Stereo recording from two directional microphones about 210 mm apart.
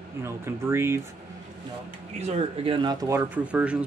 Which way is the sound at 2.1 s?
30° right (ahead or behind).